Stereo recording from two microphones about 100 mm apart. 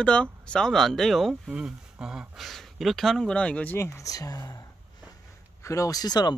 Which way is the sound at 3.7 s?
30° left (ahead or behind).